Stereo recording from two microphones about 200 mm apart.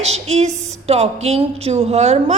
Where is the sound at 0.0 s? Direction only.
30° right (ahead or behind).